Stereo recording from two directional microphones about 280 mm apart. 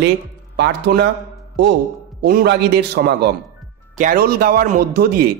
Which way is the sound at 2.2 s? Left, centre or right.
Right.